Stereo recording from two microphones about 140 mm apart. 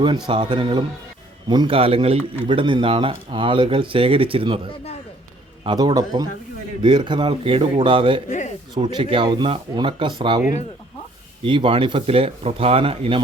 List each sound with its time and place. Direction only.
0.3 s speech: 35° right (ahead or behind)
5.6 s a man's voice: 30° right (ahead or behind)
8.3 s a sound: 55° left (ahead or behind)
8.7 s speech: 35° right (ahead or behind)
11.4 s speech: 35° right (ahead or behind)